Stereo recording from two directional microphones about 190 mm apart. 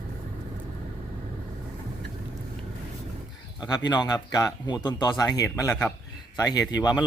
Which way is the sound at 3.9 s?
20° left (ahead or behind).